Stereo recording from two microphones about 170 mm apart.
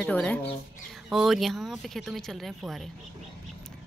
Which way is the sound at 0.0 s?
5° left (ahead or behind).